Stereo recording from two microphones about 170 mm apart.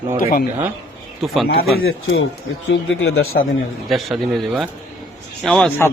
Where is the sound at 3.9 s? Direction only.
Centre (ahead or behind).